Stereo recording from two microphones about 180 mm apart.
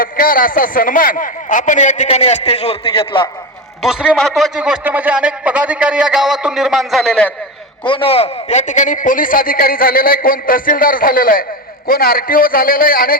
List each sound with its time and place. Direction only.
0.0 s a man's voice: 50° left (ahead or behind); by 3.2 s 30° left (ahead or behind)
3.8 s speech: 5° right (ahead or behind)
7.9 s a man's voice: 30° left (ahead or behind); by 13.1 s 55° left (ahead or behind)